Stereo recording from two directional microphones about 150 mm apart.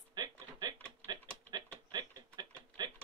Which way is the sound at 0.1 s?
25° right (ahead or behind).